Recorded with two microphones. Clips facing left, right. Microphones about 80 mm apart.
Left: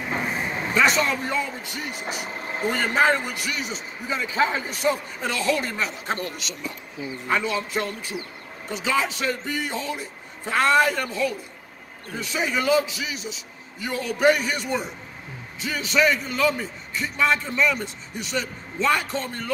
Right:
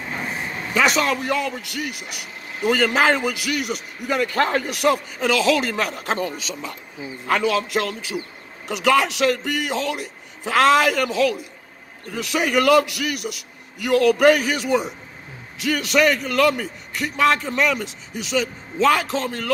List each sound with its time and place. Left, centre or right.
0.0 s a sound: centre
0.7 s a man's voice: right
2.6 s a man's voice: right
7.2 s a man's voice: right
12.1 s a man's voice: right